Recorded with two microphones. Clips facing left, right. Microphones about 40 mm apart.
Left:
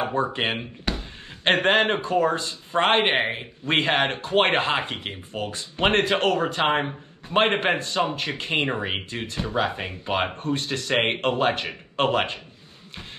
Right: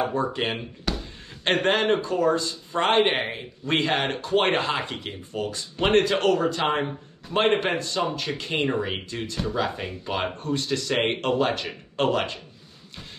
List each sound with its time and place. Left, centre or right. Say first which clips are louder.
0.0 s speech: left 1 dB; left
3.1 s speech: left 3 dB; left